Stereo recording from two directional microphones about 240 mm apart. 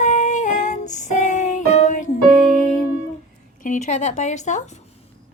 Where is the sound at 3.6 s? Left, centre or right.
Left.